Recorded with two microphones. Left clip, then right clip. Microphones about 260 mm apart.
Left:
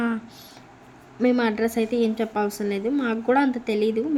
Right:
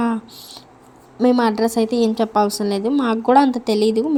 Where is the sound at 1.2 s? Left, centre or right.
Centre.